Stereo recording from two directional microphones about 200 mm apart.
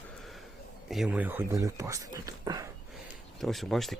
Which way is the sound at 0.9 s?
5° right (ahead or behind).